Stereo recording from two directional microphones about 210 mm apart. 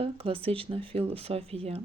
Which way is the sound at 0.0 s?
25° right (ahead or behind).